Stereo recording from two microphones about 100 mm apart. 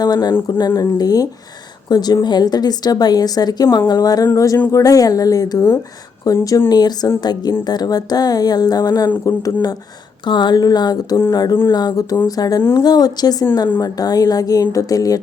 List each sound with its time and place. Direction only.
0.0 s speech: 40° left (ahead or behind)